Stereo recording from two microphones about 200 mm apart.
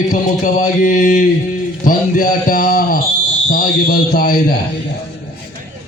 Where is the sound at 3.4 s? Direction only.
45° left (ahead or behind).